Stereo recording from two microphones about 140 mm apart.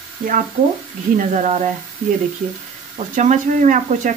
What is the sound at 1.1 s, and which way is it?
Speech, 60° right (ahead or behind).